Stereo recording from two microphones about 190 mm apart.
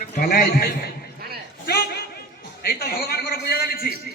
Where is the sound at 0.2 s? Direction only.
55° left (ahead or behind).